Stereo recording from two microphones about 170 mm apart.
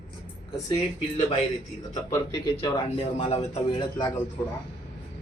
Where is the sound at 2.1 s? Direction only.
25° left (ahead or behind).